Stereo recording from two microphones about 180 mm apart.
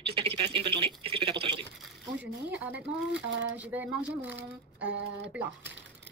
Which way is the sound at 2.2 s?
75° right (ahead or behind).